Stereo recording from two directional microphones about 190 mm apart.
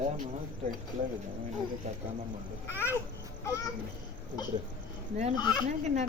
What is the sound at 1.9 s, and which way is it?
Speech, 35° right (ahead or behind).